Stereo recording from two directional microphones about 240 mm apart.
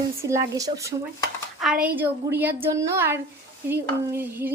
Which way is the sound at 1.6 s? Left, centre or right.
Centre.